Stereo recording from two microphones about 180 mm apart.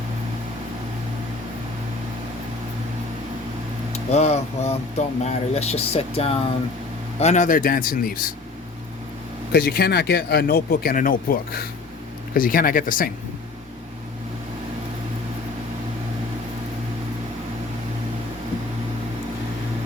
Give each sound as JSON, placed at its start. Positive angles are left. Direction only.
{"t": 3.9, "sound": "speech", "side_deg": 35}
{"t": 9.5, "sound": "speech", "side_deg": 60}